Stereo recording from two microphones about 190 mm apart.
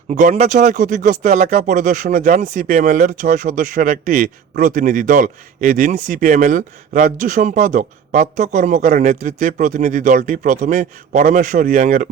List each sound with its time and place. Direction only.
0.1 s speech: 40° right (ahead or behind)